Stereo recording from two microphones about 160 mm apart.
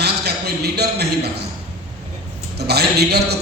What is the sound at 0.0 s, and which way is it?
A man's voice, 90° right.